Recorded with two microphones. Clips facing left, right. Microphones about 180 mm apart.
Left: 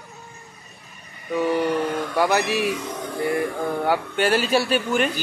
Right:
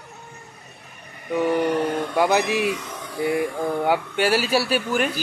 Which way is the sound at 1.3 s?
15° right (ahead or behind).